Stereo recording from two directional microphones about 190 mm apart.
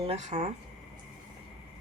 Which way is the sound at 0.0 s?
35° right (ahead or behind).